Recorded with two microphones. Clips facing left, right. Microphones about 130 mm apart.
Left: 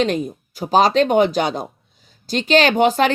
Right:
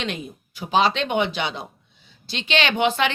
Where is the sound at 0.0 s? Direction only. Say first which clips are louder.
Left 10 dB; 40° left (ahead or behind).